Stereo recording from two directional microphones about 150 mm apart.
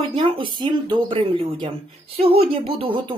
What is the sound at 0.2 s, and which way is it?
Speech, 35° right (ahead or behind).